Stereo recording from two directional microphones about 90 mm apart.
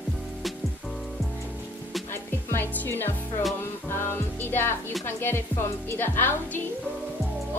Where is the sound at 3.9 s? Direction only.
25° left (ahead or behind).